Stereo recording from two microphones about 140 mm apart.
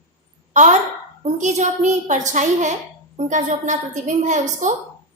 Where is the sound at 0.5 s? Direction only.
60° right (ahead or behind).